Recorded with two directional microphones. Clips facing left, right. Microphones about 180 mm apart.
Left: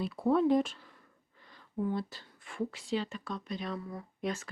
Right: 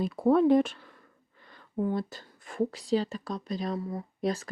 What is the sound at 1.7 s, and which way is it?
Speech, 50° right (ahead or behind).